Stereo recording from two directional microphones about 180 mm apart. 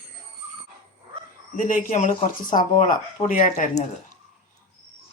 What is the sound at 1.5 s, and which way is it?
Speech, 45° left (ahead or behind).